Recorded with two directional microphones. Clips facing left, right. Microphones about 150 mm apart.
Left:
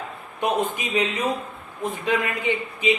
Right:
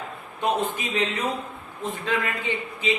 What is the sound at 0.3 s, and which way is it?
A man's voice, 15° left (ahead or behind).